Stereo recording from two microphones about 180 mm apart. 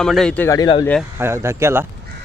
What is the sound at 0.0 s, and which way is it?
Speech, centre (ahead or behind).